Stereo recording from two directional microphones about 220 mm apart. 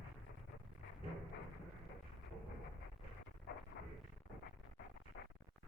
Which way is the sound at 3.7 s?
50° left (ahead or behind).